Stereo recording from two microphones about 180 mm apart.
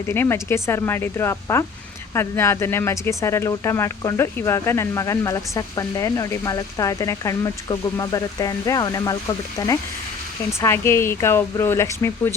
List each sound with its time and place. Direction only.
0.1 s speech: 15° left (ahead or behind)